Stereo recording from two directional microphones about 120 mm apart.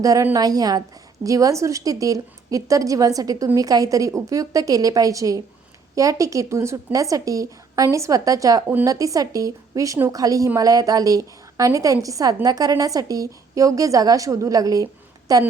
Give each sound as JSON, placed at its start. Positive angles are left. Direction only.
{"t": 0.0, "sound": "a woman's voice", "side_deg": -30}